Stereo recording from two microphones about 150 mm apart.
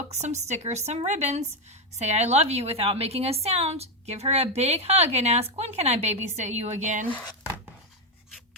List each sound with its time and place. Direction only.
0.1 s a woman's voice: 50° right (ahead or behind)